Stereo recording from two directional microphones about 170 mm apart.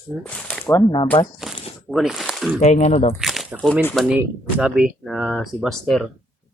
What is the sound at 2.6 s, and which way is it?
Speech, 40° left (ahead or behind).